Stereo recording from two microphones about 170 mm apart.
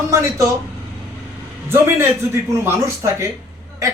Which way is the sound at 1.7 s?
15° right (ahead or behind).